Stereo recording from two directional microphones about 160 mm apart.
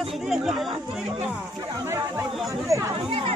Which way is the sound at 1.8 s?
15° right (ahead or behind).